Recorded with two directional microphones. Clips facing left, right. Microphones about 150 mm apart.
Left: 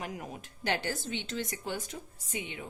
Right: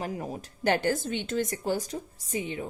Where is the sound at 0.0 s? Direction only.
35° right (ahead or behind).